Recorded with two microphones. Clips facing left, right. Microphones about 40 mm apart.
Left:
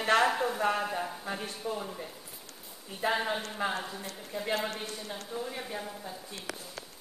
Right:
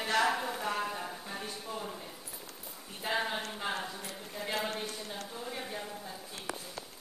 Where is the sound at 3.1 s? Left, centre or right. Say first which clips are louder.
Right 1 dB; centre.